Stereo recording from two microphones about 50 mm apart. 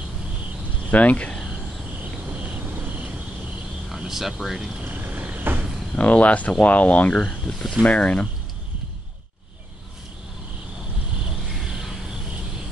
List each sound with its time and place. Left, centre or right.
0.8 s speech: left
2.3 s cricket: right
4.1 s speech: centre
4.8 s frog: right
5.4 s a sound: right
5.9 s speech: left